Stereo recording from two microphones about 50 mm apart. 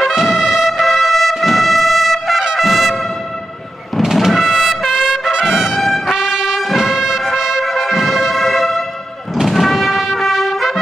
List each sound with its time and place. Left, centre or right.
0.0 s trumpet: centre
4.0 s trumpet: centre
5.8 s brass instrument: centre
6.1 s brass instrument: centre
7.3 s music: centre
7.6 s brass instrument: centre
9.3 s music: centre